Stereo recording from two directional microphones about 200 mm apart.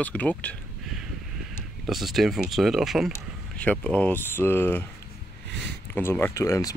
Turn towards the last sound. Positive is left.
turn(degrees=15)  # may be behind; listen again after turning